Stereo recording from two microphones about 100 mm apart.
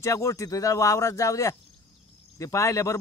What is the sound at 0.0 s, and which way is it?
Speech, 30° left (ahead or behind).